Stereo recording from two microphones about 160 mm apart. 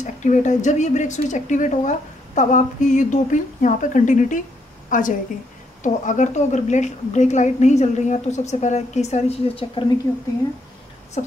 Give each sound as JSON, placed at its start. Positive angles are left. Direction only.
{"t": 0.0, "sound": "speech", "side_deg": 50}
{"t": 4.8, "sound": "a sound", "side_deg": 55}
{"t": 5.8, "sound": "speech", "side_deg": 50}
{"t": 11.2, "sound": "speech", "side_deg": 50}